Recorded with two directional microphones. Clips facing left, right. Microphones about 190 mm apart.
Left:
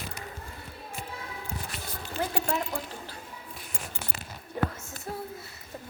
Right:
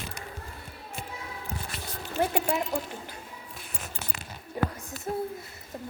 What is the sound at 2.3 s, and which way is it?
Speech, 15° right (ahead or behind).